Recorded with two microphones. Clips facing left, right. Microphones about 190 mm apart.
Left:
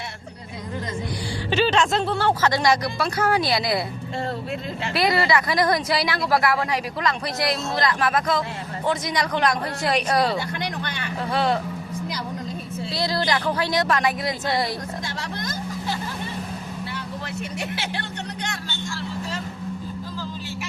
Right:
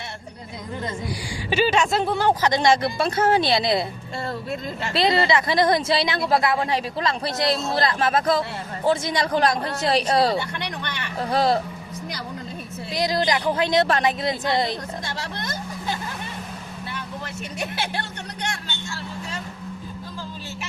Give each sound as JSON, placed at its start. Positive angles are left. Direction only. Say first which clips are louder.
{"t": 1.5, "sound": "a woman's voice", "louder": "even", "side_deg": -10}
{"t": 4.9, "sound": "a woman's voice", "louder": "right 1 dB", "side_deg": -25}
{"t": 11.2, "sound": "speech", "louder": "right 2 dB", "side_deg": -40}
{"t": 12.9, "sound": "a woman's voice", "louder": "right 2 dB", "side_deg": -15}